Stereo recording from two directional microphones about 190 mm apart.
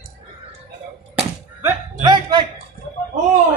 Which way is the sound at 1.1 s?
10° right (ahead or behind).